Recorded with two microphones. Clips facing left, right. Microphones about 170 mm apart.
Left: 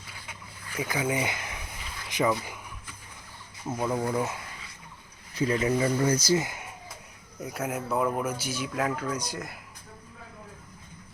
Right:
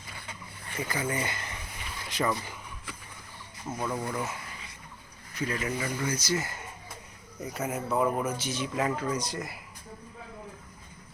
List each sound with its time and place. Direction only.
0.8 s speech: 10° left (ahead or behind)
3.7 s speech: 15° left (ahead or behind)
5.3 s speech: 30° left (ahead or behind)
6.3 s speech: 15° left (ahead or behind)
7.4 s speech: centre (ahead or behind)